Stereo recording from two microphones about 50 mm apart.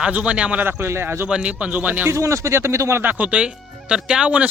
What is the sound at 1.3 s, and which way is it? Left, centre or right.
Speech, right.